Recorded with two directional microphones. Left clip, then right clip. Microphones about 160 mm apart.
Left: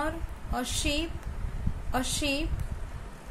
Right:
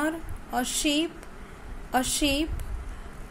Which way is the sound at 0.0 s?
30° right (ahead or behind).